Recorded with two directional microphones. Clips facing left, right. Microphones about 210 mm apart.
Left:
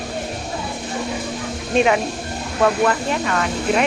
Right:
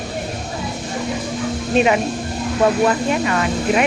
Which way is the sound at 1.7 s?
5° right (ahead or behind).